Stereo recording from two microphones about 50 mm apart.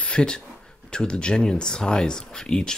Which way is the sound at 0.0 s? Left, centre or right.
Centre.